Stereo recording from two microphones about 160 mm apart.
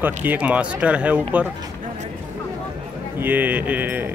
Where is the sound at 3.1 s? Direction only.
10° right (ahead or behind).